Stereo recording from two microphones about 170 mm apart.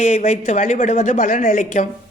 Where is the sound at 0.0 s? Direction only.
45° left (ahead or behind).